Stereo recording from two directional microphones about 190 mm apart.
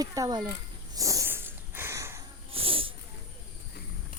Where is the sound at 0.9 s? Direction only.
15° right (ahead or behind).